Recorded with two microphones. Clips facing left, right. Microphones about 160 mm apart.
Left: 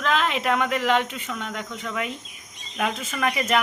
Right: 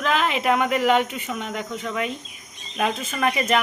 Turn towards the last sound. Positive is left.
turn(degrees=0)  # may be behind; listen again after turning